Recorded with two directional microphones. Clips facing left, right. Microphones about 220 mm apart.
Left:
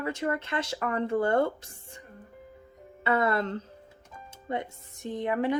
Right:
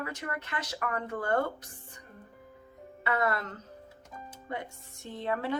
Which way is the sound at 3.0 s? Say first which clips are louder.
Left 5 dB; 25° left (ahead or behind).